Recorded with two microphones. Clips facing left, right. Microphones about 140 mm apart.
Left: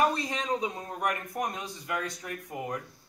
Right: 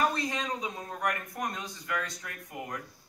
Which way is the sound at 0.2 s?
30° left (ahead or behind).